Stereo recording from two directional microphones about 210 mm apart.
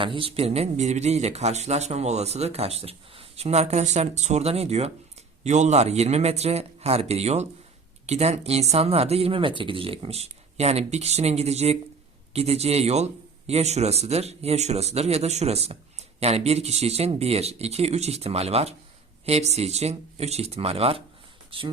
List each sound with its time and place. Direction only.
0.0 s speech: 25° right (ahead or behind)